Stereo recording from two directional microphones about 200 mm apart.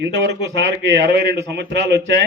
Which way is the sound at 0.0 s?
60° right (ahead or behind).